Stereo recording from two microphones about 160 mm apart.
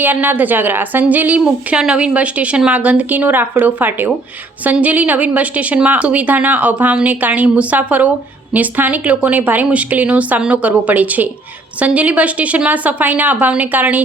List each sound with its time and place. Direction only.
0.0 s a woman's voice: 10° right (ahead or behind)